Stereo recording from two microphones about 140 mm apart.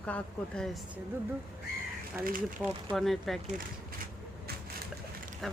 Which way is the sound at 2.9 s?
Centre (ahead or behind).